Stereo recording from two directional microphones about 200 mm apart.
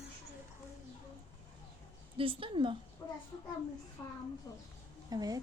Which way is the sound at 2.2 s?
25° right (ahead or behind).